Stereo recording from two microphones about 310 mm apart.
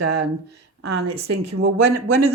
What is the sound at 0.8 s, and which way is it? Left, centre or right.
Speech, right.